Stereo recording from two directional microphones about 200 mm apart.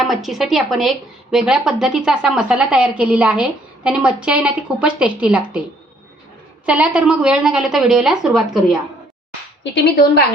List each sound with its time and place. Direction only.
0.0 s speech: centre (ahead or behind)
6.7 s speech: 5° right (ahead or behind)
9.7 s a woman's voice: 55° left (ahead or behind)